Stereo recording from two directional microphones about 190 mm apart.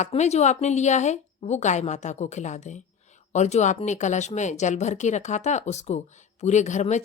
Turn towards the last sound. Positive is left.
turn(degrees=40)  # may be behind; listen again after turning